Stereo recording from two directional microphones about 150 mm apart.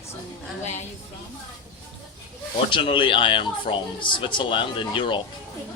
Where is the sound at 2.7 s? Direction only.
35° left (ahead or behind).